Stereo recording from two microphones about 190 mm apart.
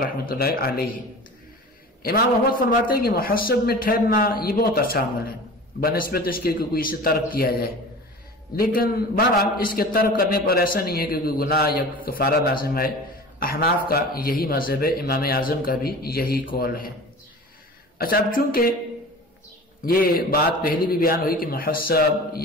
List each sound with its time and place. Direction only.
0.0 s a man's voice: 50° left (ahead or behind)
2.0 s a man's voice: 50° left (ahead or behind)
17.9 s a man's voice: 50° left (ahead or behind)
19.8 s a man's voice: 50° left (ahead or behind)